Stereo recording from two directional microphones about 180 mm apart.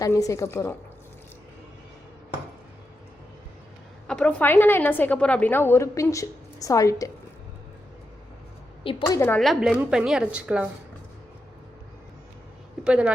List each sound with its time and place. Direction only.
0.0 s a woman's voice: 20° left (ahead or behind)
4.0 s a woman's voice: 5° left (ahead or behind)
8.8 s a woman's voice: 30° left (ahead or behind)
9.0 s a woman's voice: 15° left (ahead or behind)
9.4 s a woman's voice: centre (ahead or behind)
12.8 s speech: 5° right (ahead or behind)